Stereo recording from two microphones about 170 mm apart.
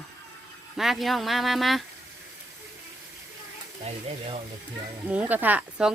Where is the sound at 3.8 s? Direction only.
35° right (ahead or behind).